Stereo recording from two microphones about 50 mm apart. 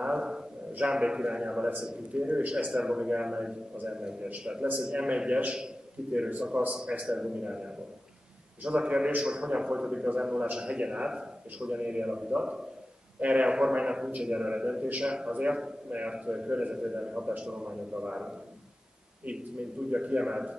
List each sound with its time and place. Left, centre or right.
0.0 s a sound: centre
0.7 s a man's voice: centre
19.9 s a man's voice: right